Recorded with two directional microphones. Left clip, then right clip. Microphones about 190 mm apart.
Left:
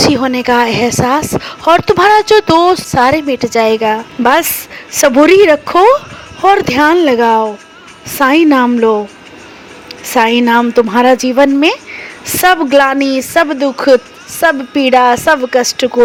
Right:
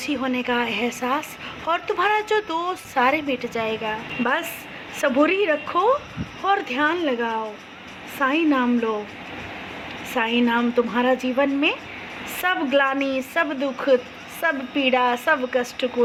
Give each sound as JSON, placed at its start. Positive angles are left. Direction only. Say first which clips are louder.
{"t": 0.1, "sound": "a woman's voice", "louder": "left 12 dB", "side_deg": 55}
{"t": 10.1, "sound": "a woman's voice", "louder": "left 12 dB", "side_deg": 55}